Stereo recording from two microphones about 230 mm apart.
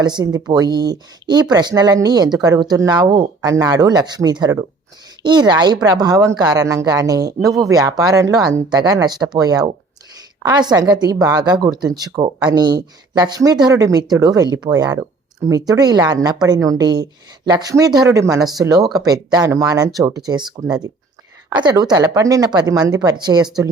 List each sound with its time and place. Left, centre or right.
0.0 s speech: centre